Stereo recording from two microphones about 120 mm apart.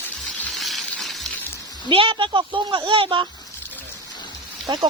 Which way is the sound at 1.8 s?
45° right (ahead or behind).